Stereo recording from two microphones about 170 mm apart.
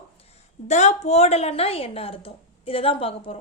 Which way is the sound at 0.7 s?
45° left (ahead or behind).